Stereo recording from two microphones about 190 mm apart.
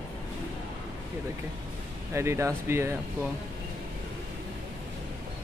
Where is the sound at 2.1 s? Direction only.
15° right (ahead or behind).